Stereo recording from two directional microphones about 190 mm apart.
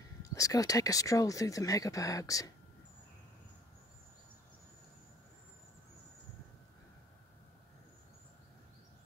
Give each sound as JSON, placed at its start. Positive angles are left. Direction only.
{"t": 0.2, "sound": "speech", "side_deg": 20}